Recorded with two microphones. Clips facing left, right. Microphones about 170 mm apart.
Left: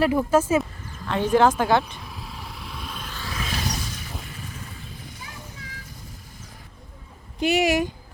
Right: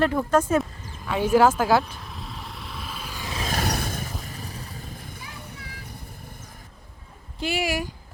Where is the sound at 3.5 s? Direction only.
55° right (ahead or behind).